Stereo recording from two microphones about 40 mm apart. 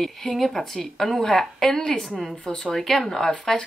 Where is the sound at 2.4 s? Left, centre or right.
Centre.